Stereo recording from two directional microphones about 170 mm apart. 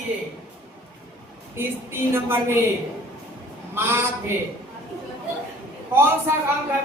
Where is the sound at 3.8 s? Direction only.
15° right (ahead or behind).